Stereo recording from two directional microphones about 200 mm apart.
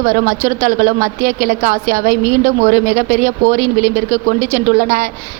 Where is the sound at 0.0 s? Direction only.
40° right (ahead or behind).